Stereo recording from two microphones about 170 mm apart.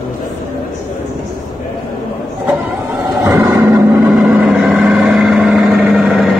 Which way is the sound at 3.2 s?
20° right (ahead or behind).